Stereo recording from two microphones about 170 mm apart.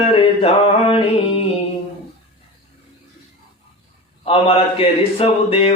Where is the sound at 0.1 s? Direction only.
35° left (ahead or behind).